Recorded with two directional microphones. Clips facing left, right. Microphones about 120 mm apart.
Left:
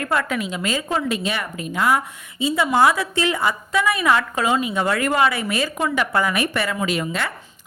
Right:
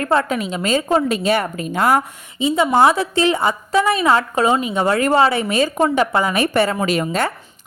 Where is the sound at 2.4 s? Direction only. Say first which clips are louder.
Right 3 dB; 25° right (ahead or behind).